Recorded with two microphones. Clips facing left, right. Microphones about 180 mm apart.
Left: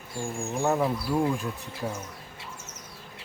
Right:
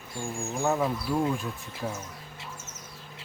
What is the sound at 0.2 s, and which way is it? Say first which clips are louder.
Speech: left 2 dB; centre (ahead or behind).